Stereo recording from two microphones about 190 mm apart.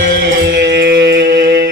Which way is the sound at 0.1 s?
60° right (ahead or behind).